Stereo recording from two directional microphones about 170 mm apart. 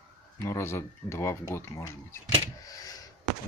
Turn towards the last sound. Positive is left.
turn(degrees=20)  # may be behind; listen again after turning